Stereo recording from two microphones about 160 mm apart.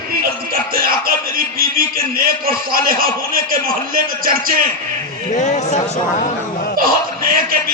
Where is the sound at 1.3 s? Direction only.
65° right (ahead or behind).